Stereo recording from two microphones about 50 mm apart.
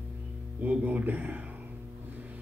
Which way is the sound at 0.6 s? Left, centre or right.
Right.